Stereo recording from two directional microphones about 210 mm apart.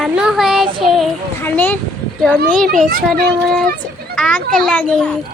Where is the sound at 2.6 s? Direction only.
45° right (ahead or behind).